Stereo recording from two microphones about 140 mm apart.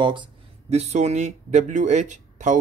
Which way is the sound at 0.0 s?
35° right (ahead or behind).